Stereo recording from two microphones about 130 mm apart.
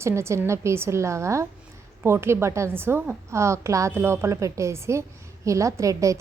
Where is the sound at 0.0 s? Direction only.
20° right (ahead or behind).